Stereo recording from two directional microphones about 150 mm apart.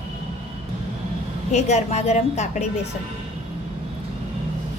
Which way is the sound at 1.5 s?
50° left (ahead or behind).